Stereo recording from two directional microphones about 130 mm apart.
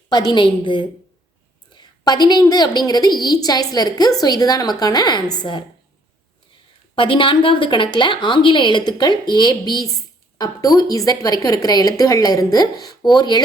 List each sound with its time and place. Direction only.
0.1 s a woman's voice: 35° left (ahead or behind)
6.9 s a woman's voice: 40° left (ahead or behind)